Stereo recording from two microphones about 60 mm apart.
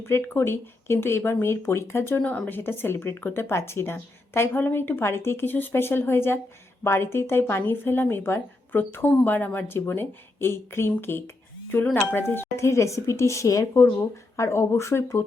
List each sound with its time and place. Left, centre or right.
0.3 s speech: left
12.5 s a woman's voice: left
14.3 s speech: left